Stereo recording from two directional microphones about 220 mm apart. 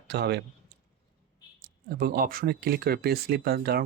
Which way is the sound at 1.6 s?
45° right (ahead or behind).